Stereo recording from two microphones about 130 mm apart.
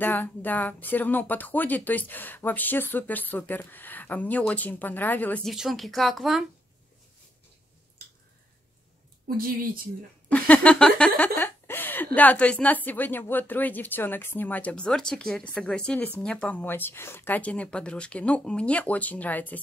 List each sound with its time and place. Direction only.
0.0 s speech: 15° left (ahead or behind)
5.4 s speech: centre (ahead or behind)
9.4 s speech: 90° right
10.3 s speech: 10° left (ahead or behind)